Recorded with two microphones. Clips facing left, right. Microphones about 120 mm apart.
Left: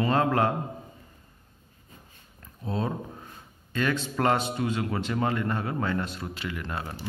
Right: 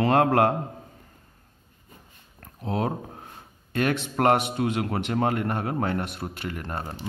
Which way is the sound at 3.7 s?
60° right (ahead or behind).